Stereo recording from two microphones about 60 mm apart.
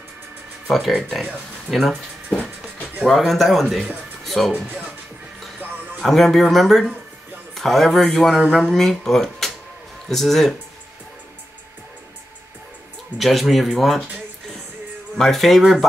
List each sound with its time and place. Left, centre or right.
0.7 s speech: centre
3.1 s speech: centre
4.2 s music: centre
4.5 s speech: right
6.0 s speech: centre
13.2 s speech: centre
15.1 s speech: centre